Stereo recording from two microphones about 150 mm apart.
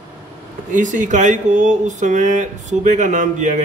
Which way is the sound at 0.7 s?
55° right (ahead or behind).